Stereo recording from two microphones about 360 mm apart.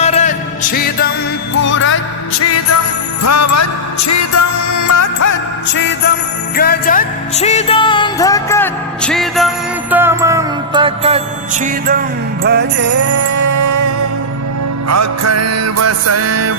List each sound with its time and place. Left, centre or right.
0.0 s music: centre; by 5.4 s left
5.6 s music: left; by 12.9 s right
13.1 s music: right